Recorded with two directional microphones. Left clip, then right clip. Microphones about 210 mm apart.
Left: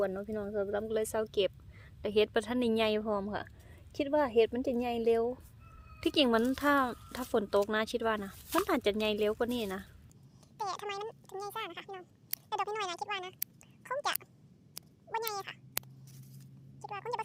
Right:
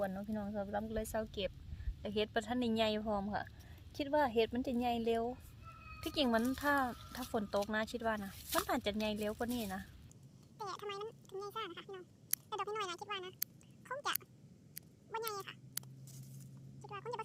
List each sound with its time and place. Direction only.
0.0 s a woman's voice: 45° left (ahead or behind)
6.0 s speech: 45° left (ahead or behind)
10.6 s speech: 25° left (ahead or behind)
15.1 s cat: 25° left (ahead or behind)
16.8 s cat: 25° left (ahead or behind)